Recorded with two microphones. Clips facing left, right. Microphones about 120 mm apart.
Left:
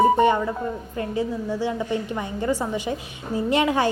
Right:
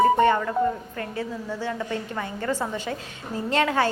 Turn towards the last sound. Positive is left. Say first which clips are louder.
# left 2 dB
turn(degrees=15)  # may be behind; listen again after turning